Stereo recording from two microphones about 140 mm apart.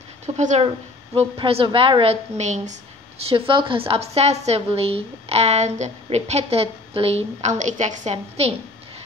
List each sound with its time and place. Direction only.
0.4 s speech: 60° right (ahead or behind)
1.1 s a woman's voice: 45° right (ahead or behind)
2.3 s a woman's voice: 55° right (ahead or behind)